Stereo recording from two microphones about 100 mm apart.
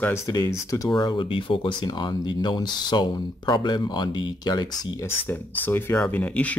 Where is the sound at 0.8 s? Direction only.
45° left (ahead or behind).